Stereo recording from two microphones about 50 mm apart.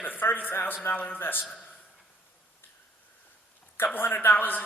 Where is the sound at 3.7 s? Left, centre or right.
Left.